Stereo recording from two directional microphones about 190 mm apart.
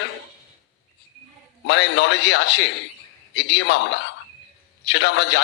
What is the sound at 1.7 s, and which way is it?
A man's voice, 65° left (ahead or behind).